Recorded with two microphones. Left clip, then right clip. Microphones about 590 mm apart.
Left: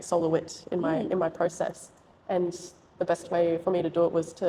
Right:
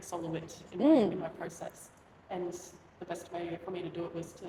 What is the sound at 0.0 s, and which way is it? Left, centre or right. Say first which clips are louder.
Speech: left 13 dB; left.